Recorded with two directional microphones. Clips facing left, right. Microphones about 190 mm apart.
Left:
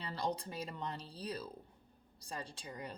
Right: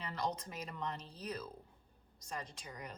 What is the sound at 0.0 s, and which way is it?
A woman's voice, 30° left (ahead or behind).